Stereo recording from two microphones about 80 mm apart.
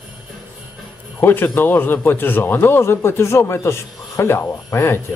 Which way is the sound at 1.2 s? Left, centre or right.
Left.